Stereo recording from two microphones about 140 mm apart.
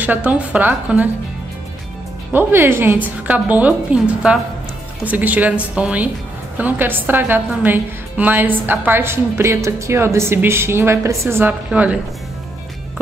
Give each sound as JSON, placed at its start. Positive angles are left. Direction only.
{"t": 0.0, "sound": "a woman's voice", "side_deg": -10}
{"t": 2.3, "sound": "a woman's voice", "side_deg": -15}